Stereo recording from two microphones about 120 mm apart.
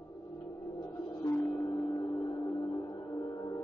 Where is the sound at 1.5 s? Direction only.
25° left (ahead or behind).